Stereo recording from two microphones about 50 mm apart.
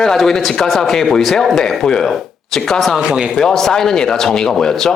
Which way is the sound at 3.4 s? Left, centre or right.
Centre.